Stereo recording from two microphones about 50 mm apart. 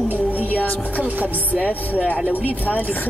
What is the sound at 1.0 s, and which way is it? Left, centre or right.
Speech, right.